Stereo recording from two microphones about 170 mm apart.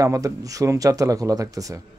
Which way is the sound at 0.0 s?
20° right (ahead or behind).